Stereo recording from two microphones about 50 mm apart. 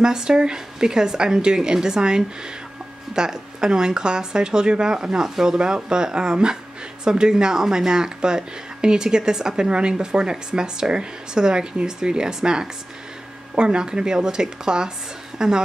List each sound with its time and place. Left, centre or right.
0.0 s a woman's voice: centre